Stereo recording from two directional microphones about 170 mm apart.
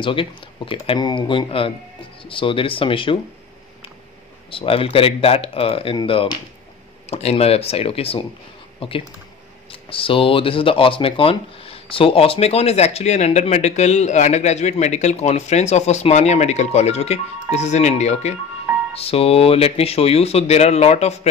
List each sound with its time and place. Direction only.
0.0 s speech: 30° left (ahead or behind)
4.5 s speech: 30° left (ahead or behind)